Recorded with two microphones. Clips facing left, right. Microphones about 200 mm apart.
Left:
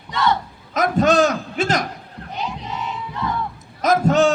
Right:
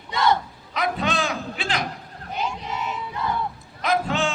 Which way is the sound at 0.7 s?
45° left (ahead or behind).